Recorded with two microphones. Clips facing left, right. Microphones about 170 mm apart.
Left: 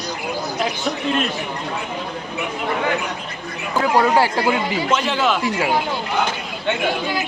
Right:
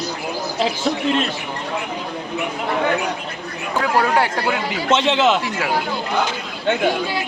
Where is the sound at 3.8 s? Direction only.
5° left (ahead or behind).